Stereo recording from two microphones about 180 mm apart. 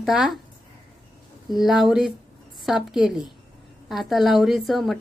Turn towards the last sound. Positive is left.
turn(degrees=0)  # may be behind; listen again after turning